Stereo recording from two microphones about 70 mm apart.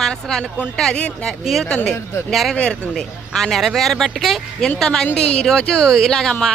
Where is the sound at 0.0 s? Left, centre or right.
Centre.